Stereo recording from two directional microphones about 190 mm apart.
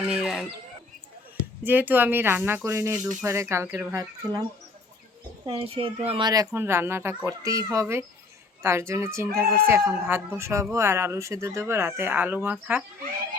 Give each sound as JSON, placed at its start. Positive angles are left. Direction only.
{"t": 0.1, "sound": "a sound", "side_deg": 0}
{"t": 1.6, "sound": "speech", "side_deg": -10}
{"t": 5.5, "sound": "a child's voice", "side_deg": -30}